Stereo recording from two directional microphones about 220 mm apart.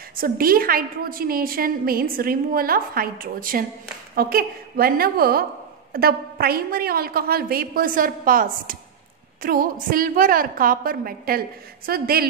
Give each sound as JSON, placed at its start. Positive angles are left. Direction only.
{"t": 0.1, "sound": "a woman's voice", "side_deg": -40}